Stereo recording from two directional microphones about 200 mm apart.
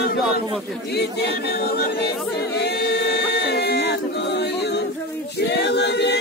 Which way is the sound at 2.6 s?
55° left (ahead or behind).